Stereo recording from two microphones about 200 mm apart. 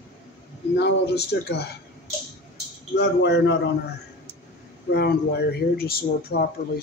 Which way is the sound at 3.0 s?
60° left (ahead or behind).